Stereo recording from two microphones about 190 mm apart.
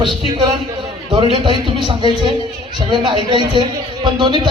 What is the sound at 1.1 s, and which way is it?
Speech, 25° right (ahead or behind).